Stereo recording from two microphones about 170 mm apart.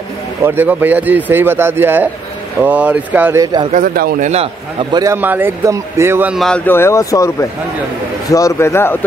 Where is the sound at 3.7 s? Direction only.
55° right (ahead or behind).